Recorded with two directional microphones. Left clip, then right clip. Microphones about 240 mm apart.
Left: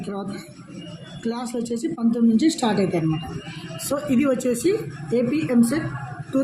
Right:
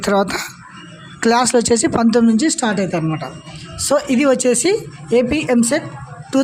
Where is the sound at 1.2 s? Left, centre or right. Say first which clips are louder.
Right 15 dB; right.